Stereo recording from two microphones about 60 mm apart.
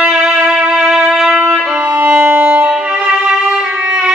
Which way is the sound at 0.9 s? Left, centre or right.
Centre.